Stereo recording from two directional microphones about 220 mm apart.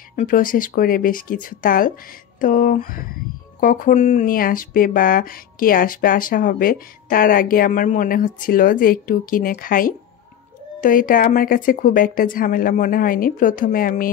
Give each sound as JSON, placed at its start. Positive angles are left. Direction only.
{"t": 0.1, "sound": "speech", "side_deg": 40}